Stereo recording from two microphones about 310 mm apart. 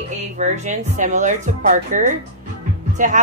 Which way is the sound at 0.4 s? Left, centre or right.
Right.